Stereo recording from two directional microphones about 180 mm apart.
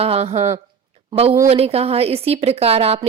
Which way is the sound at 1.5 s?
35° right (ahead or behind).